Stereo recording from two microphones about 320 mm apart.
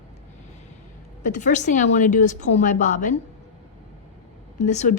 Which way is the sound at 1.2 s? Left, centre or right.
Left.